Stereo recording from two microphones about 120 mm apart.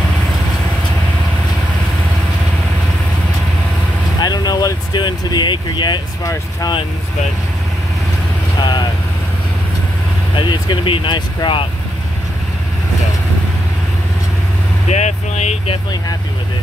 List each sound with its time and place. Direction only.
4.2 s vehicle: 35° left (ahead or behind)
8.5 s vehicle: 40° left (ahead or behind)
10.3 s speech: 40° left (ahead or behind)
14.9 s speech: 70° left (ahead or behind)